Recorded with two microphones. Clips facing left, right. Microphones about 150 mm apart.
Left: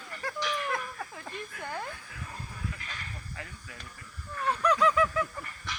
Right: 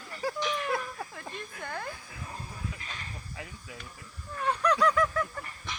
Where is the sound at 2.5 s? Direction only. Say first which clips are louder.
Even; 20° right (ahead or behind).